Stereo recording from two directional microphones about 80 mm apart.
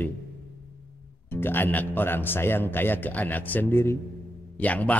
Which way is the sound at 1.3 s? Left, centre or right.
Left.